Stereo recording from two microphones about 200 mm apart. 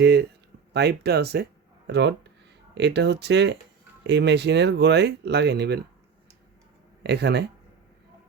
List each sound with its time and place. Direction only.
0.0 s speech: 55° right (ahead or behind)
7.0 s speech: 55° right (ahead or behind)